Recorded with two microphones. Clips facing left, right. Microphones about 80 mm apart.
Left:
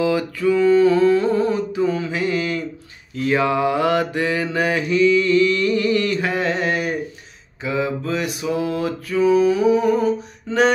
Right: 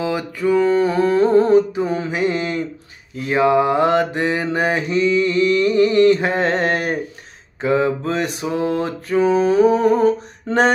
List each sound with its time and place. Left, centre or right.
0.0 s music: right
2.0 s mantra: right
10.5 s mantra: right